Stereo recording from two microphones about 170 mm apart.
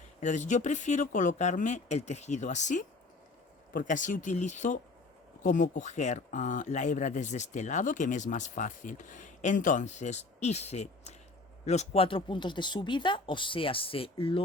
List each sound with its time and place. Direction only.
0.2 s speech: 45° left (ahead or behind)